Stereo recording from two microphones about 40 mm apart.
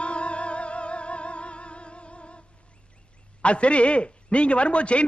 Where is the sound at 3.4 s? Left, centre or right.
Left.